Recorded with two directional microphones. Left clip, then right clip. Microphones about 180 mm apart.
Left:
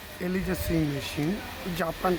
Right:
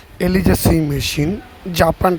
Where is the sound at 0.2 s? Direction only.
40° right (ahead or behind).